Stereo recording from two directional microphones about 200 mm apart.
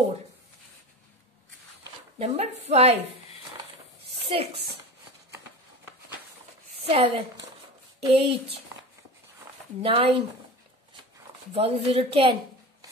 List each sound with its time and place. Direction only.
2.1 s a woman's voice: 35° right (ahead or behind)
4.2 s a sound: 30° right (ahead or behind)
6.9 s a woman's voice: 30° right (ahead or behind)
9.8 s a woman's voice: 30° right (ahead or behind)
11.5 s a woman's voice: 30° right (ahead or behind)